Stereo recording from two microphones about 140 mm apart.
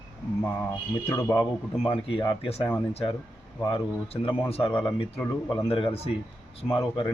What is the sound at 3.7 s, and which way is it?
Speech, 40° left (ahead or behind).